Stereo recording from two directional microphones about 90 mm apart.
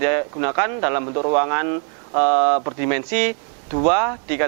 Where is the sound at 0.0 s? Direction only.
20° right (ahead or behind).